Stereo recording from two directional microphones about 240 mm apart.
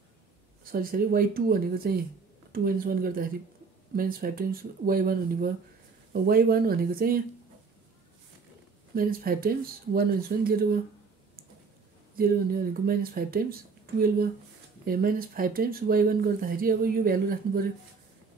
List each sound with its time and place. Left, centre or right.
0.7 s speech: right
8.9 s speech: right
12.2 s speech: right